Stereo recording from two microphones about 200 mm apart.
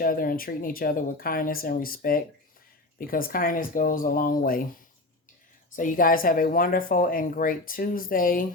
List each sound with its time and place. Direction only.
0.0 s speech: 45° left (ahead or behind)
5.7 s speech: 40° left (ahead or behind)